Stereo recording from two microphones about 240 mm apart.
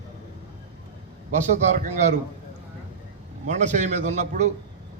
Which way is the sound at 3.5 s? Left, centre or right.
Right.